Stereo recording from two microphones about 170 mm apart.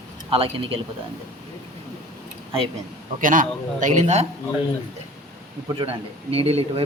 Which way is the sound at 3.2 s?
50° right (ahead or behind).